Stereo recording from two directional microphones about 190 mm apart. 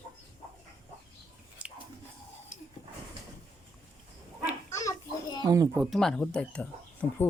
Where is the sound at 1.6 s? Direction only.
5° right (ahead or behind).